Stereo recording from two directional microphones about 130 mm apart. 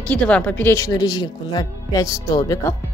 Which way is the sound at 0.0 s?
10° left (ahead or behind).